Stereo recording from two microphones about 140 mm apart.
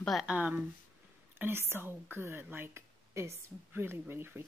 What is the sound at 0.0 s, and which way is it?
Speech, centre (ahead or behind).